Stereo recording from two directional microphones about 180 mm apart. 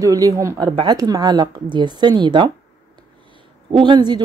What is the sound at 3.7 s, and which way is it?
Speech, 25° right (ahead or behind).